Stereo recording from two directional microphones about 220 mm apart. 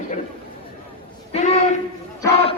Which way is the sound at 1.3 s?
30° left (ahead or behind).